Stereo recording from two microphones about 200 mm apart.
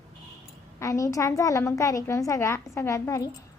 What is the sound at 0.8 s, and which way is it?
A woman's voice, 15° left (ahead or behind).